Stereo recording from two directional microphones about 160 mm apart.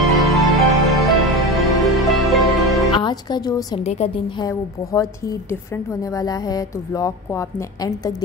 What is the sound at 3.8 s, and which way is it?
Speech, 40° left (ahead or behind).